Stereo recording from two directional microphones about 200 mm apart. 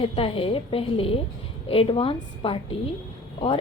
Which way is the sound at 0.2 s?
25° left (ahead or behind).